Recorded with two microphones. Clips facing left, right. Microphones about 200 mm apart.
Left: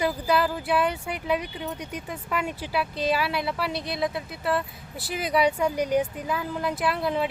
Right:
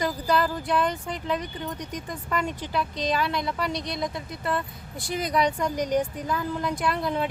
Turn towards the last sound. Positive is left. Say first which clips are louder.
# left 1 dB
turn(degrees=5)  # may be behind; listen again after turning